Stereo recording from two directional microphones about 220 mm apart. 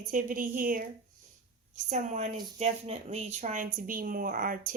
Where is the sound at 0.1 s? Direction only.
35° right (ahead or behind).